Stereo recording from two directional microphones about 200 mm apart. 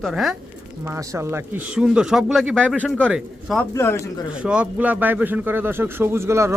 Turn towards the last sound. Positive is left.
turn(degrees=-15)  # may be behind; listen again after turning